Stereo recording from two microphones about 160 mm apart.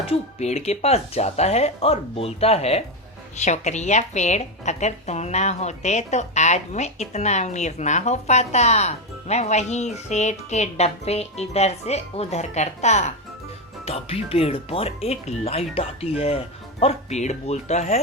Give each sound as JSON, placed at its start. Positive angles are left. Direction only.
{"t": 0.1, "sound": "a woman's voice", "side_deg": 45}